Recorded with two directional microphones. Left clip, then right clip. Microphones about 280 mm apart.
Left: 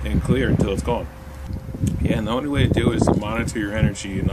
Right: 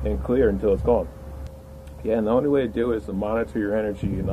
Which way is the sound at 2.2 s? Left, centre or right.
Centre.